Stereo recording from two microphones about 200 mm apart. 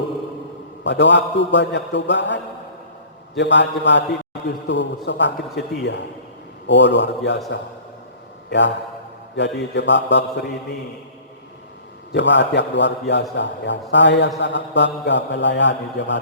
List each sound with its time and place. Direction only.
0.9 s a man's voice: 60° left (ahead or behind)
12.1 s a man's voice: 60° left (ahead or behind)